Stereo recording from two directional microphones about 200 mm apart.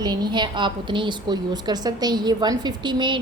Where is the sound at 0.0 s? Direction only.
20° right (ahead or behind).